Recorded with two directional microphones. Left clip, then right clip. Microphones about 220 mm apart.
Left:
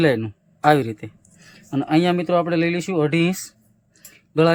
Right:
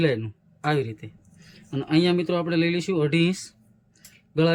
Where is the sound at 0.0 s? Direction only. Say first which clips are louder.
Left 5 dB; 20° left (ahead or behind).